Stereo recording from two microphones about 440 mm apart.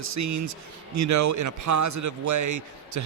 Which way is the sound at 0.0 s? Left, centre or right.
Right.